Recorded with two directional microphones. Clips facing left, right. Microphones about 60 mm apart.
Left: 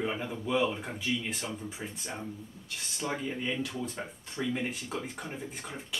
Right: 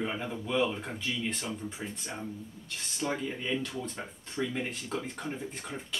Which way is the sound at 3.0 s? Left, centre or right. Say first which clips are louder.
Right 1 dB; centre.